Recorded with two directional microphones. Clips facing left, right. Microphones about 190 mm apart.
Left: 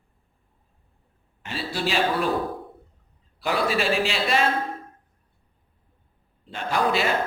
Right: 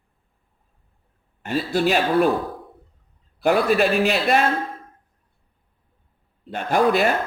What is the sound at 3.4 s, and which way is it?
A man's voice, 55° right (ahead or behind).